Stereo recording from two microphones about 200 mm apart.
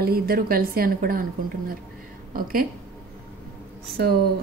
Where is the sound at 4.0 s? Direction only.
50° right (ahead or behind).